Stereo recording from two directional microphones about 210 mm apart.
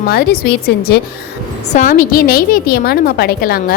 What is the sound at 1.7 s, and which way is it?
A woman's voice, 40° left (ahead or behind).